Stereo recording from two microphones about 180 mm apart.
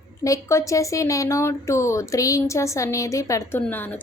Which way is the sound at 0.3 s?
15° left (ahead or behind).